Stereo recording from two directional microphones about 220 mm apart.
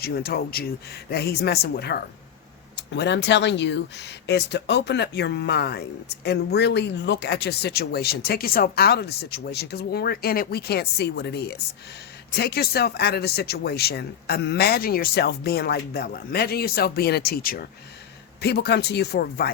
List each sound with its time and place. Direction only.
0.0 s speech: 45° left (ahead or behind)